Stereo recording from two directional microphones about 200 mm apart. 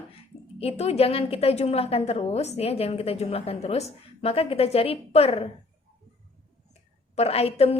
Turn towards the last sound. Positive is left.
turn(degrees=30)  # may be behind; listen again after turning